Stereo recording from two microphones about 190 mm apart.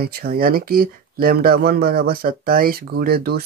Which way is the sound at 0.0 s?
55° right (ahead or behind).